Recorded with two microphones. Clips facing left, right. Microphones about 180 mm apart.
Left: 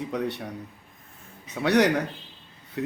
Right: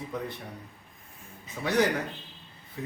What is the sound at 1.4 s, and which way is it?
Speech, 75° left (ahead or behind).